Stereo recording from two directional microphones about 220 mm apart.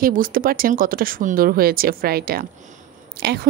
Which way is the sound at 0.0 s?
40° right (ahead or behind).